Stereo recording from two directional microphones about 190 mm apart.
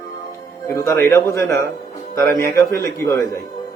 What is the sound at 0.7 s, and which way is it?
A man's voice, 15° left (ahead or behind).